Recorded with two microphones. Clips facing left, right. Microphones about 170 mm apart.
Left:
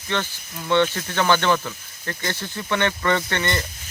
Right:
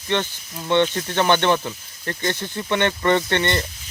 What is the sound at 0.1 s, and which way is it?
Speech, 20° right (ahead or behind).